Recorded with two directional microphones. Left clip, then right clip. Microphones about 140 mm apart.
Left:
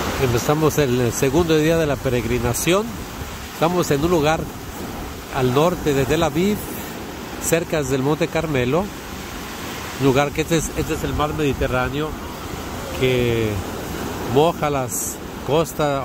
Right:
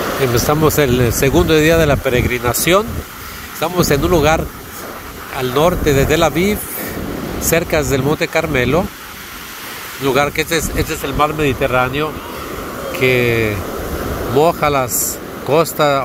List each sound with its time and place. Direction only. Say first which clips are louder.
0.4 s speech: right 5 dB; 10° left (ahead or behind)
10.0 s speech: right 4 dB; 20° left (ahead or behind)